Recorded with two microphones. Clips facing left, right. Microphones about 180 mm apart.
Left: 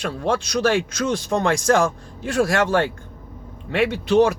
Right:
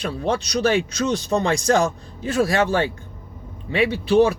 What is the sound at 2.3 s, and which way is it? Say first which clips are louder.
Speech: even; 70° left (ahead or behind).